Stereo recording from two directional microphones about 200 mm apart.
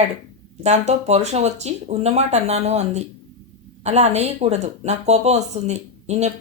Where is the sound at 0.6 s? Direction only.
35° right (ahead or behind).